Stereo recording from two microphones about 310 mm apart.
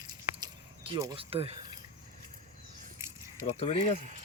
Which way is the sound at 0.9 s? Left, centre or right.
Centre.